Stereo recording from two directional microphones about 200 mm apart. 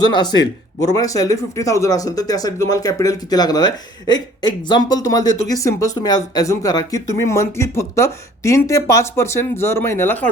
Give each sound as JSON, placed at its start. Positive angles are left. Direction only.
{"t": 0.0, "sound": "a man's voice", "side_deg": 20}